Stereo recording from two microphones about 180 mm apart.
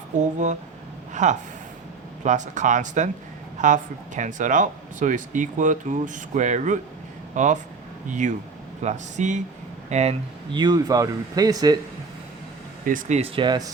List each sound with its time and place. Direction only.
0.2 s speech: 40° right (ahead or behind)
10.5 s speech: 25° right (ahead or behind)
12.8 s speech: 50° right (ahead or behind); by 13.7 s 25° right (ahead or behind)